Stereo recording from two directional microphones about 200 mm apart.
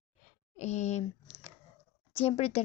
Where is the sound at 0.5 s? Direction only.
35° left (ahead or behind).